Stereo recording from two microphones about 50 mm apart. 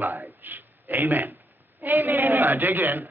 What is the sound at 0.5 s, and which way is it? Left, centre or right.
A man's voice, right.